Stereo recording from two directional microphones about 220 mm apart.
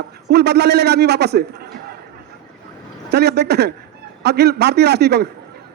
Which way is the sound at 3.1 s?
50° right (ahead or behind).